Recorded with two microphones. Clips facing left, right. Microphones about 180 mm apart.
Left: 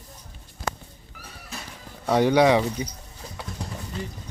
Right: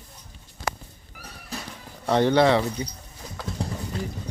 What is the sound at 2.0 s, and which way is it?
Speech, 10° left (ahead or behind).